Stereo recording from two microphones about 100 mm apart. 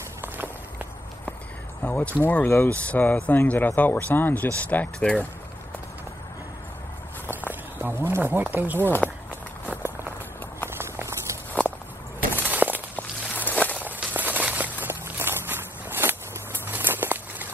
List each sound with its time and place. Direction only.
0.2 s walk: 20° right (ahead or behind)
1.8 s speech: 10° left (ahead or behind)
2.7 s speech: 15° left (ahead or behind)
7.4 s speech: 20° right (ahead or behind)
8.8 s speech: 20° left (ahead or behind)
9.7 s walk: 25° right (ahead or behind)
12.4 s walk: 15° right (ahead or behind)
12.9 s walk: 15° left (ahead or behind)
13.7 s walk: 15° right (ahead or behind)